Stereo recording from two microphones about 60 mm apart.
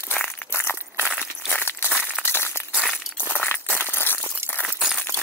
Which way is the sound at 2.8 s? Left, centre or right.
Centre.